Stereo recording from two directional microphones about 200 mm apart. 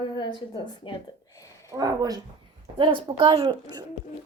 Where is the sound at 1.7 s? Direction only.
20° right (ahead or behind).